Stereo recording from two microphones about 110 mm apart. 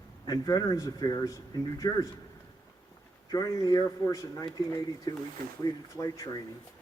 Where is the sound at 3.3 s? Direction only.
35° left (ahead or behind).